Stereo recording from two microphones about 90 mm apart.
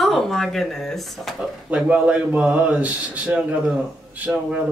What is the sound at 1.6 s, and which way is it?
Speech, 15° right (ahead or behind).